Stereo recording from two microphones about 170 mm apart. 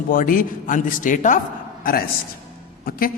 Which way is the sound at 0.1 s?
55° left (ahead or behind).